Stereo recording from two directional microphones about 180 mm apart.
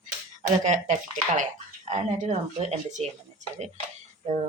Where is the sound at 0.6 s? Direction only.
45° right (ahead or behind).